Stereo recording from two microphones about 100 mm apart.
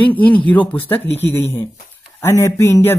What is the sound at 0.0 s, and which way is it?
Speech, 15° left (ahead or behind).